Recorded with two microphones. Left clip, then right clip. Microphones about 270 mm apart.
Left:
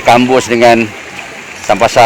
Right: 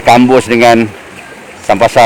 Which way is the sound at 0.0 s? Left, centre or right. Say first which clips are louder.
Right 1 dB; right.